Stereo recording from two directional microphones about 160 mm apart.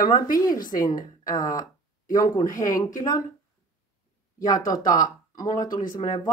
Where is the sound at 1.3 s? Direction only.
25° left (ahead or behind).